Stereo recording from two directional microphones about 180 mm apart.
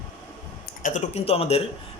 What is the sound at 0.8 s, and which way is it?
Speech, 45° left (ahead or behind).